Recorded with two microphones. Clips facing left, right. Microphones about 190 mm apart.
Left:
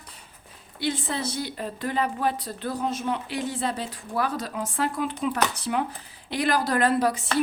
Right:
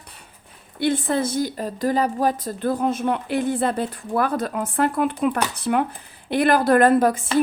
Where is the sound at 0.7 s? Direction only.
55° right (ahead or behind).